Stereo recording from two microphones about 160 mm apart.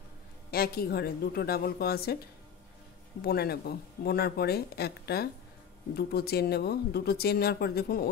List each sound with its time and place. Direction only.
0.5 s speech: 70° left (ahead or behind)
3.2 s speech: 75° left (ahead or behind)